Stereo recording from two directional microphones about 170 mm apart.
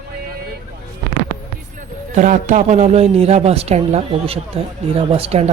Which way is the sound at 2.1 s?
45° right (ahead or behind).